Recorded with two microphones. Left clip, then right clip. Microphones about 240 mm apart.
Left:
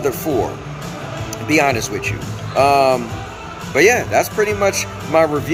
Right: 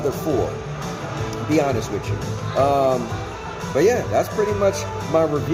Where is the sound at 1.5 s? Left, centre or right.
Centre.